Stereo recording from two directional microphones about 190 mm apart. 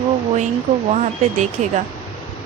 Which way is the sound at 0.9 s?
40° right (ahead or behind).